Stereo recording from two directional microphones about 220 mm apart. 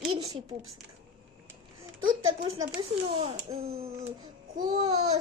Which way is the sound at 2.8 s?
25° right (ahead or behind).